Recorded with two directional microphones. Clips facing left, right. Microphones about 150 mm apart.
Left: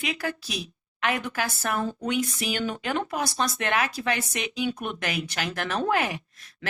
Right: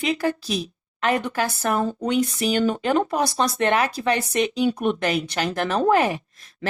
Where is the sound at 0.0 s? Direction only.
35° right (ahead or behind).